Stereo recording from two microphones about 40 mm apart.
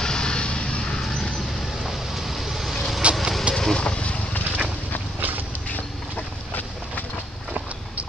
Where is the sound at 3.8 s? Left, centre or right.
Left.